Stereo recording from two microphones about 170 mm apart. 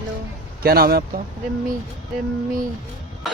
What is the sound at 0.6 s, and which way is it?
Speech, 65° right (ahead or behind).